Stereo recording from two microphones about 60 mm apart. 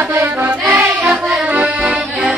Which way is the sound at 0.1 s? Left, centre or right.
Right.